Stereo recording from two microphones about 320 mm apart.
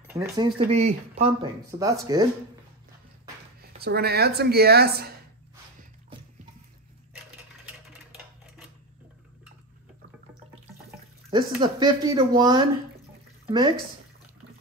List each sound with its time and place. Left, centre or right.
0.1 s speech: centre
3.7 s speech: right
10.9 s speech: centre